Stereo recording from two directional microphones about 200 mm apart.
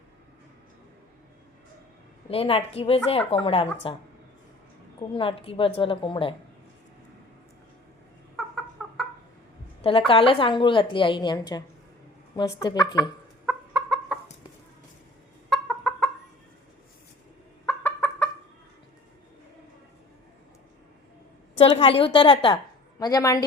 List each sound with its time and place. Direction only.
2.3 s a woman's voice: 30° left (ahead or behind)
5.1 s a woman's voice: 25° left (ahead or behind)
8.4 s chicken: centre (ahead or behind)
10.1 s a woman's voice: 25° left (ahead or behind)
13.4 s chicken: 5° right (ahead or behind)
15.4 s chicken: centre (ahead or behind)
17.7 s chicken: 10° left (ahead or behind)
21.6 s a woman's voice: 30° left (ahead or behind)